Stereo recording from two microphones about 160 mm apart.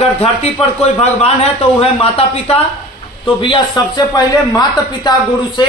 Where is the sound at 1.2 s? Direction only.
40° left (ahead or behind).